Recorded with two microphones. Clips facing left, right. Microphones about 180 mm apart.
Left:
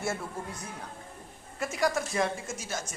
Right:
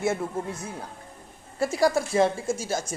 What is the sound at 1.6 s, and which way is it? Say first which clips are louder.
A woman's voice: right 6 dB; 30° right (ahead or behind).